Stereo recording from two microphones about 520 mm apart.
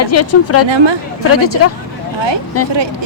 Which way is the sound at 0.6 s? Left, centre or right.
Right.